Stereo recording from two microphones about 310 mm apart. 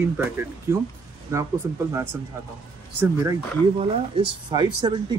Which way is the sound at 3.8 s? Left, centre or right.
Centre.